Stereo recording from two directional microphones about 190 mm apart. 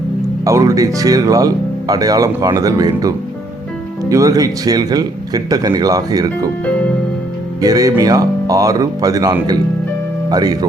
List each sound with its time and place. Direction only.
0.4 s speech: 15° right (ahead or behind)
7.6 s speech: 20° right (ahead or behind)